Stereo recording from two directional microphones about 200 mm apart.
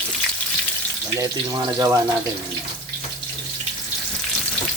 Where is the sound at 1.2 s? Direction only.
15° right (ahead or behind).